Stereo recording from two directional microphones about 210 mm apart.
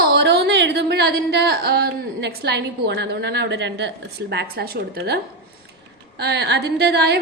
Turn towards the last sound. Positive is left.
turn(degrees=-55)  # may be behind; listen again after turning